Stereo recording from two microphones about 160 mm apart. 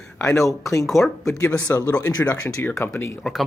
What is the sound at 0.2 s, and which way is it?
Speech, 20° left (ahead or behind).